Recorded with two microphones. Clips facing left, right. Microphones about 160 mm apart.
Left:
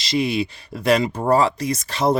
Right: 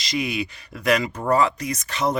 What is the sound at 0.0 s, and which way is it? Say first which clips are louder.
Speech: left 5 dB; 30° left (ahead or behind).